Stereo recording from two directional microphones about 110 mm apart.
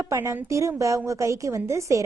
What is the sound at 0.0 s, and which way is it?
A woman's voice, 25° right (ahead or behind).